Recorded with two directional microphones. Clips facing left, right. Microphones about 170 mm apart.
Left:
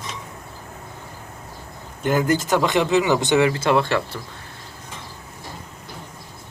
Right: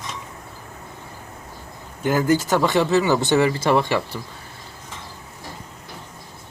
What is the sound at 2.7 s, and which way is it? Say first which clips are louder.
Speech: even; 15° left (ahead or behind).